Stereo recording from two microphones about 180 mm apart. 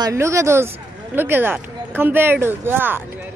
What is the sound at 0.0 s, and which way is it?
Speech, 15° right (ahead or behind).